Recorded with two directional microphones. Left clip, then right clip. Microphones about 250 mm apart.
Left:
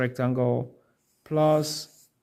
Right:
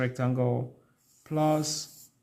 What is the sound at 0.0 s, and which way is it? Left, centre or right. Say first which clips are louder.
Speech: left 3 dB; left.